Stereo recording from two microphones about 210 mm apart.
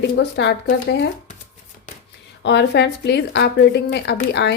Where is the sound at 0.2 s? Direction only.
55° left (ahead or behind).